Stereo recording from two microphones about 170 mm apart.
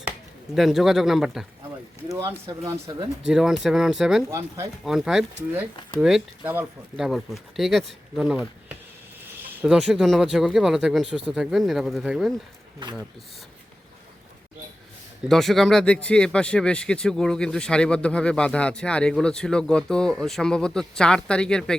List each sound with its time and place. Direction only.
0.5 s speech: centre (ahead or behind)
3.2 s speech: 5° right (ahead or behind)
4.3 s speech: 15° right (ahead or behind)
4.8 s speech: centre (ahead or behind)
15.3 s speech: centre (ahead or behind)